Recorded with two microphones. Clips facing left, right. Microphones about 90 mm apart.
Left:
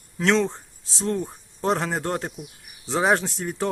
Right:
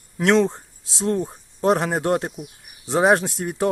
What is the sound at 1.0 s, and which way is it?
Speech, 20° right (ahead or behind).